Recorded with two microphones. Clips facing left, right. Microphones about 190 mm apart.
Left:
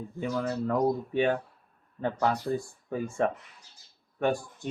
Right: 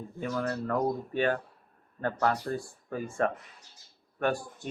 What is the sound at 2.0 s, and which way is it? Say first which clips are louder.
Speech: left 1 dB; 15° left (ahead or behind).